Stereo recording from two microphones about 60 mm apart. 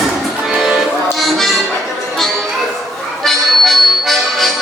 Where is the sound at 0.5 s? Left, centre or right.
Centre.